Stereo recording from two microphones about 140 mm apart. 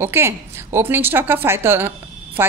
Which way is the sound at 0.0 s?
15° right (ahead or behind).